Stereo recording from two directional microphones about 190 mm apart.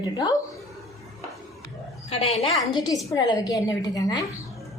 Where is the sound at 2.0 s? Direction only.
30° left (ahead or behind).